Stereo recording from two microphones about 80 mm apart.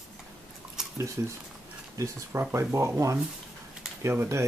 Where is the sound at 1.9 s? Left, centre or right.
Right.